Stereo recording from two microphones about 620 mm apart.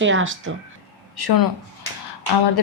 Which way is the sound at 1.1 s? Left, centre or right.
Left.